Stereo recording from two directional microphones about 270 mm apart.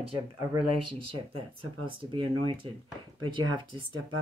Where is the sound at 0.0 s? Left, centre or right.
Centre.